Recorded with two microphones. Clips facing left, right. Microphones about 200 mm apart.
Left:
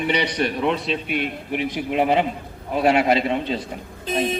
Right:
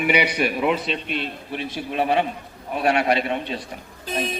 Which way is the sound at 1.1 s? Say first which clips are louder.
Left 4 dB; 15° left (ahead or behind).